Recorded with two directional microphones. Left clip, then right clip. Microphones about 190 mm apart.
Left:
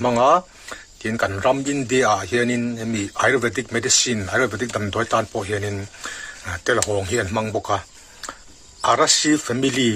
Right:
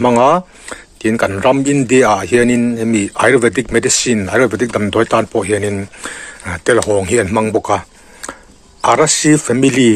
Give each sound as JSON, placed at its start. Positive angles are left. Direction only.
{"t": 0.0, "sound": "speech", "side_deg": -35}